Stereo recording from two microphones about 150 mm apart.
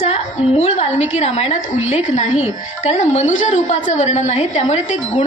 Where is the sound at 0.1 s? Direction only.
45° left (ahead or behind).